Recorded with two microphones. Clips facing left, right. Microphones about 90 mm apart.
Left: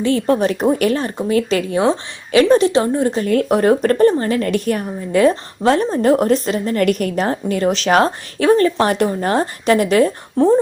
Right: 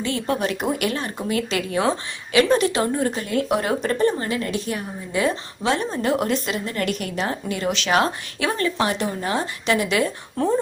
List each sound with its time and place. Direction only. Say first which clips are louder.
0.0 s speech: left 8 dB; 35° left (ahead or behind)
3.2 s speech: left 11 dB; 45° left (ahead or behind)
10.3 s speech: left 8 dB; 25° left (ahead or behind)